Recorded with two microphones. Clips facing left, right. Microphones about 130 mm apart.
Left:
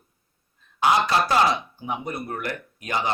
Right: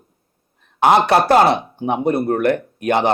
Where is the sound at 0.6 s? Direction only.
60° right (ahead or behind).